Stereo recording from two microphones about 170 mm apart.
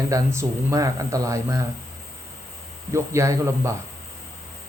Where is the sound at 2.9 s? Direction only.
15° right (ahead or behind).